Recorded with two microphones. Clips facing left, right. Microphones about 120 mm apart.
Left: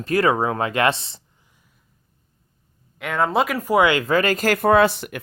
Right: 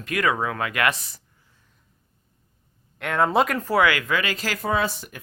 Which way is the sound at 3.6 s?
20° left (ahead or behind).